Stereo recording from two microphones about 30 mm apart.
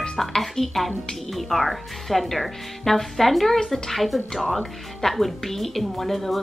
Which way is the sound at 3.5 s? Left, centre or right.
Centre.